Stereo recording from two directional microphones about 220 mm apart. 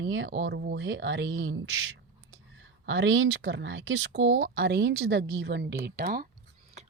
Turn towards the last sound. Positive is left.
turn(degrees=-40)  # may be behind; listen again after turning